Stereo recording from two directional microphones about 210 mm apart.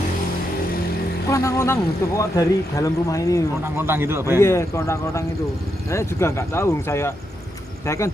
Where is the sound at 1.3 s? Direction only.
15° left (ahead or behind).